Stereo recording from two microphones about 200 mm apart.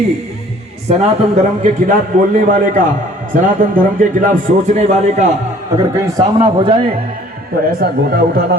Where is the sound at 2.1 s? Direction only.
40° right (ahead or behind).